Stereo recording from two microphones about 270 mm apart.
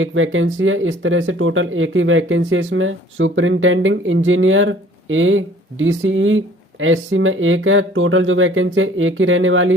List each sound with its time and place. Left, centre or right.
0.0 s speech: right